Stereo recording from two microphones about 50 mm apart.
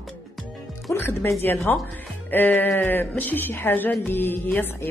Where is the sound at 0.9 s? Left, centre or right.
Left.